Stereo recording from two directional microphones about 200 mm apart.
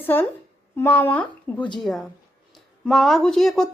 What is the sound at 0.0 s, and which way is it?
A woman's voice, 10° left (ahead or behind).